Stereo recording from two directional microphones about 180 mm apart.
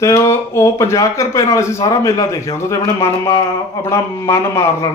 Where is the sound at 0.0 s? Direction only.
15° left (ahead or behind).